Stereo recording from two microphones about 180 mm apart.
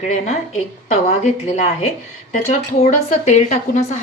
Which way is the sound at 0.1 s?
40° left (ahead or behind).